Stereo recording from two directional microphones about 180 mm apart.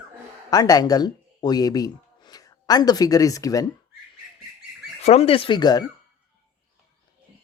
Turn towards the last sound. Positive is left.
turn(degrees=25)  # may be behind; listen again after turning